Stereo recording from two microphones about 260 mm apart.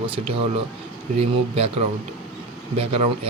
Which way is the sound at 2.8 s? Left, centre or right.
Right.